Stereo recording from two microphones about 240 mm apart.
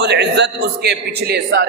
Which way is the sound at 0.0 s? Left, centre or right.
Right.